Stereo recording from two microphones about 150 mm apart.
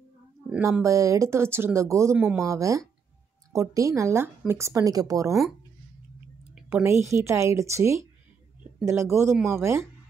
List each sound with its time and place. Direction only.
0.5 s speech: 10° right (ahead or behind)
2.4 s speech: 20° right (ahead or behind)
6.7 s speech: 15° right (ahead or behind)